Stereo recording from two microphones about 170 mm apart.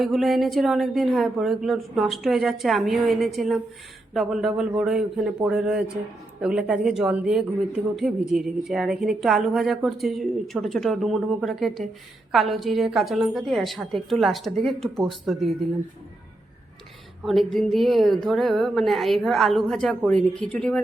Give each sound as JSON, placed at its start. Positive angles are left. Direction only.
{"t": 0.0, "sound": "a woman's voice", "side_deg": 0}
{"t": 17.2, "sound": "a woman's voice", "side_deg": 0}